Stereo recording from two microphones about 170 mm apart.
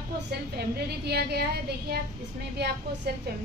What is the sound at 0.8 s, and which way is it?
A woman's voice, 70° right (ahead or behind).